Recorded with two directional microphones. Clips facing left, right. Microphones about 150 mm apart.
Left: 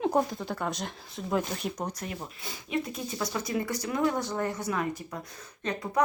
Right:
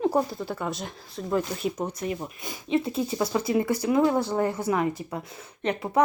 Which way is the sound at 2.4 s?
25° right (ahead or behind).